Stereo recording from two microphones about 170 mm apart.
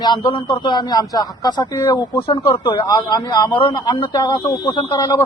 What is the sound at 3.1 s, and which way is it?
Speech, 20° left (ahead or behind).